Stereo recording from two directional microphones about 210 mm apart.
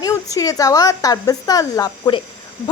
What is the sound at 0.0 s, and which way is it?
A woman's voice, 15° left (ahead or behind).